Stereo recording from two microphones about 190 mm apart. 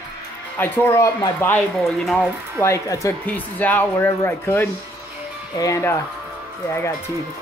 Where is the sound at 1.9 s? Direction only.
Centre (ahead or behind).